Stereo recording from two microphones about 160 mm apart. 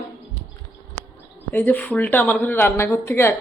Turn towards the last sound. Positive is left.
turn(degrees=15)  # may be behind; listen again after turning